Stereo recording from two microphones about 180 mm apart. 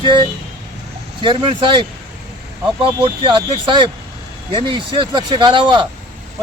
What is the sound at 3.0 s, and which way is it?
Speech, 30° right (ahead or behind).